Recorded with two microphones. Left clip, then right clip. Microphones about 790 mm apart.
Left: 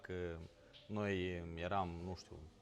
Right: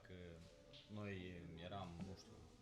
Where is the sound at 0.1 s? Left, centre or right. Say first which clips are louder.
Left 16 dB; left.